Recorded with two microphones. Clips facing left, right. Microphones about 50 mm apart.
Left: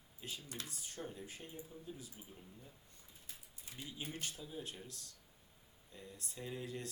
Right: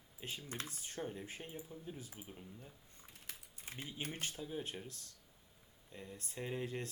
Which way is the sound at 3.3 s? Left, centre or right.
Right.